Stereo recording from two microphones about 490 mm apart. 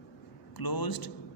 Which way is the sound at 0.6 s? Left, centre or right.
Left.